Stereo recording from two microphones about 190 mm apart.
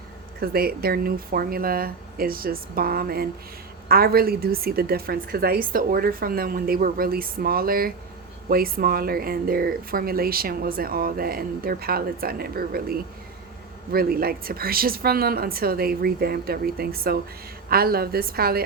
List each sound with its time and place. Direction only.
0.3 s speech: 50° right (ahead or behind)